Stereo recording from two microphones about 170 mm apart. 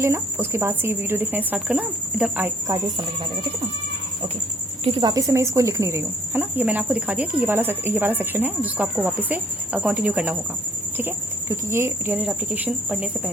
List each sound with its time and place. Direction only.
0.0 s speech: 15° right (ahead or behind)
4.8 s a woman's voice: 35° right (ahead or behind)
5.0 s speech: 20° right (ahead or behind)